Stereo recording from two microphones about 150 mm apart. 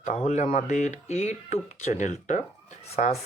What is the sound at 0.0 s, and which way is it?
Speech, 50° left (ahead or behind).